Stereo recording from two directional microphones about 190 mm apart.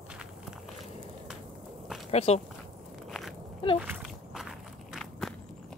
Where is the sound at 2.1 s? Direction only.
35° left (ahead or behind).